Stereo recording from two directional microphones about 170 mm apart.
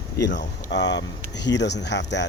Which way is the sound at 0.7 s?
90° left.